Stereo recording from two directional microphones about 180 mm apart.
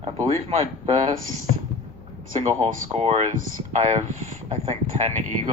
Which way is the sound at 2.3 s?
40° right (ahead or behind).